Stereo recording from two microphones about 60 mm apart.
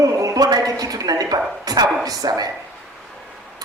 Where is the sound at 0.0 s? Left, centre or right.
Right.